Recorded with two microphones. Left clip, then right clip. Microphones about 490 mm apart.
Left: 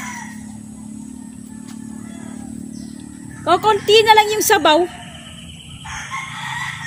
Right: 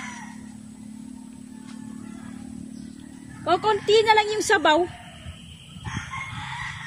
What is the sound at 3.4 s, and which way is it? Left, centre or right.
A woman's voice, right.